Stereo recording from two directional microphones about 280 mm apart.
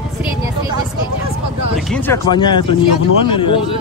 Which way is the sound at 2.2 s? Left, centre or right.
Centre.